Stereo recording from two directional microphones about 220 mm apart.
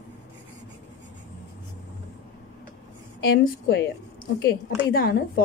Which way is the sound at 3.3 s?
50° left (ahead or behind).